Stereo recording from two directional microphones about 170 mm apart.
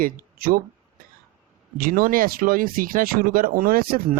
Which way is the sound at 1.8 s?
55° right (ahead or behind).